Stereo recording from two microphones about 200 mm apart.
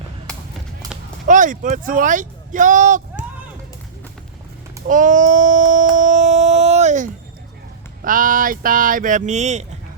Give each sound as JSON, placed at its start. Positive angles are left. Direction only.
{"t": 0.8, "sound": "a sound", "side_deg": -20}
{"t": 1.3, "sound": "speech", "side_deg": -40}
{"t": 4.9, "sound": "child singing", "side_deg": -40}
{"t": 5.9, "sound": "music", "side_deg": -40}
{"t": 8.0, "sound": "speech", "side_deg": -45}